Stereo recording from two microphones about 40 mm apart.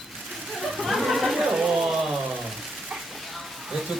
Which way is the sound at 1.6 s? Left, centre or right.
Centre.